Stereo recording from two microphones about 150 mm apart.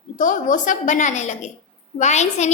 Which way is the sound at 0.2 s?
60° left (ahead or behind).